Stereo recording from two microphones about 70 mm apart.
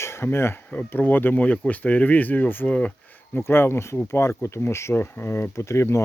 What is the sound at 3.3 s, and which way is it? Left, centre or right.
Speech, left.